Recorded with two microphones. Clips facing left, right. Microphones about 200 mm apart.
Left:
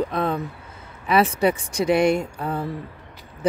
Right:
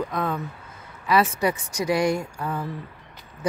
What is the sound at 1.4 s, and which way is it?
Speech, 25° left (ahead or behind).